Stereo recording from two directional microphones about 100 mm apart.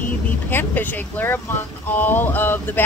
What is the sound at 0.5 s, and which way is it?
Speech, 20° left (ahead or behind).